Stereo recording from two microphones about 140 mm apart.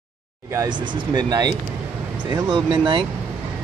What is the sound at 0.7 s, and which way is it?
Speech, 30° right (ahead or behind).